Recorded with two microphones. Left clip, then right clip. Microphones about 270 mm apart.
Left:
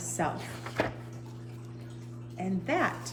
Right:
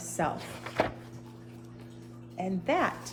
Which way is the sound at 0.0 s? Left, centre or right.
Centre.